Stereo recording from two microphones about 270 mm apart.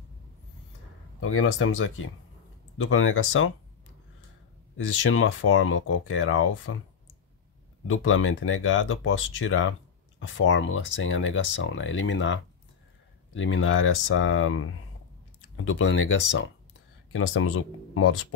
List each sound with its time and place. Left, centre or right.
1.2 s speech: left
4.7 s speech: left
7.8 s speech: left